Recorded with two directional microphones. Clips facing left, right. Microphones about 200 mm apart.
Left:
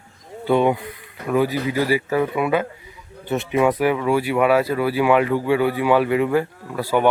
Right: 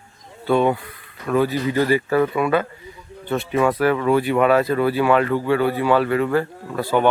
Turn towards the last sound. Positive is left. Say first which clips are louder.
# even
turn(degrees=10)  # may be behind; listen again after turning